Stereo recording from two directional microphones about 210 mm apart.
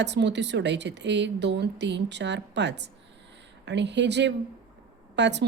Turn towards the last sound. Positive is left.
turn(degrees=-55)  # may be behind; listen again after turning